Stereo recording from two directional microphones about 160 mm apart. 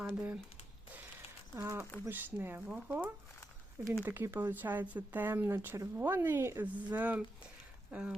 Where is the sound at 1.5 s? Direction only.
15° right (ahead or behind).